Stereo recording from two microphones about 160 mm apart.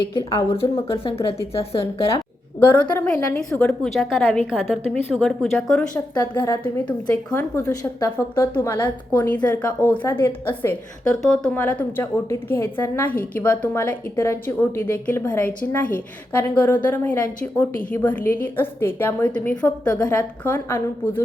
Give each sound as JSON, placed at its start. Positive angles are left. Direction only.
{"t": 0.3, "sound": "a woman's voice", "side_deg": 35}
{"t": 2.6, "sound": "a woman's voice", "side_deg": 10}
{"t": 6.3, "sound": "a woman's voice", "side_deg": 15}